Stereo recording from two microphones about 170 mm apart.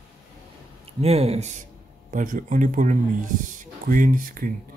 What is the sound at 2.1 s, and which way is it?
Speech, 50° right (ahead or behind).